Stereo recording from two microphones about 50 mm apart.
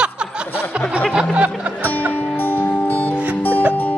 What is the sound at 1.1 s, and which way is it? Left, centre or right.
Music, centre.